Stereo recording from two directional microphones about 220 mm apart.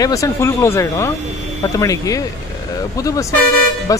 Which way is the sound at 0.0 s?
15° left (ahead or behind).